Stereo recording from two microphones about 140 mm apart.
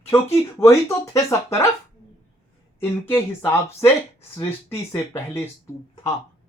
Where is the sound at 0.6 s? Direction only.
20° left (ahead or behind).